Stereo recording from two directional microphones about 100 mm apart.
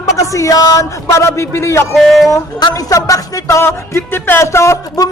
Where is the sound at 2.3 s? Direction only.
35° left (ahead or behind).